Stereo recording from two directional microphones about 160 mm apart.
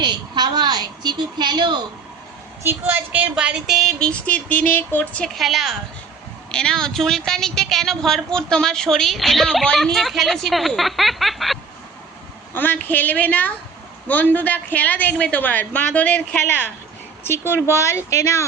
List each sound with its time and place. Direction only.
0.0 s a woman's voice: 25° right (ahead or behind)
2.6 s speech: 10° right (ahead or behind)
12.5 s a woman's voice: 10° left (ahead or behind)